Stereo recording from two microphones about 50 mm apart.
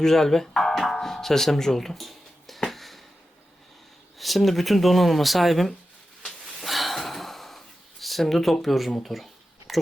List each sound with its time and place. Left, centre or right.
0.0 s music: centre
4.2 s speech: centre
6.6 s gasp: centre
9.0 s a sound: centre